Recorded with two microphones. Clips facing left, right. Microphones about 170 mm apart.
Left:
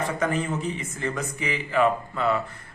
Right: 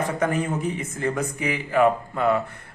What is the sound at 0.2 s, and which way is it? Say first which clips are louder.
Speech: right 2 dB; 55° right (ahead or behind).